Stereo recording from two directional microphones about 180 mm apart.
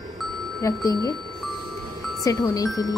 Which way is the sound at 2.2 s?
20° left (ahead or behind).